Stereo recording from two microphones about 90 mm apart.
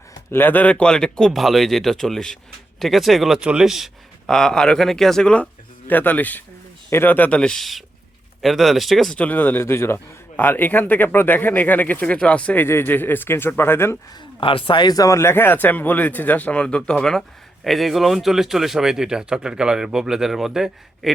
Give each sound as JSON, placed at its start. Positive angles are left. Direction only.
{"t": 0.3, "sound": "speech", "side_deg": 20}
{"t": 4.3, "sound": "speech", "side_deg": 5}
{"t": 9.1, "sound": "speech", "side_deg": 15}
{"t": 12.6, "sound": "speech", "side_deg": 25}
{"t": 14.4, "sound": "speech", "side_deg": 80}